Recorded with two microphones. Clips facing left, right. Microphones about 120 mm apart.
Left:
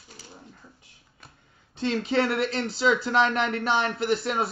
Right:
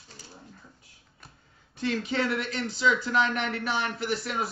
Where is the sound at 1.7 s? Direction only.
25° left (ahead or behind).